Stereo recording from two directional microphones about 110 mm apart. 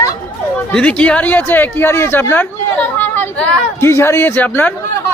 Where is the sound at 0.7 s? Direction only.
10° left (ahead or behind).